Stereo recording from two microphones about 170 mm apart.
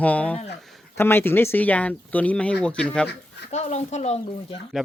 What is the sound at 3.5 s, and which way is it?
Speech, 40° left (ahead or behind).